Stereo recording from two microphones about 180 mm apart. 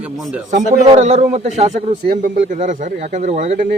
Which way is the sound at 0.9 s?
35° right (ahead or behind).